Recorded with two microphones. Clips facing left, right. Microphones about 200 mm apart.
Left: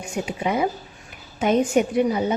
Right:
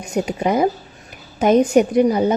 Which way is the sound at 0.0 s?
40° right (ahead or behind).